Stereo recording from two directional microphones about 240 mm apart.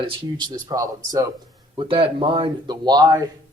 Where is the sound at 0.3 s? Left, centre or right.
Centre.